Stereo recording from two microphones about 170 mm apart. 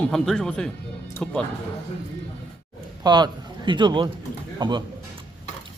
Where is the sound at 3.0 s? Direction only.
25° right (ahead or behind).